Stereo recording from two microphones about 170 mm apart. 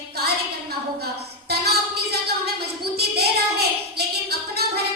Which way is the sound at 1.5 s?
70° right (ahead or behind).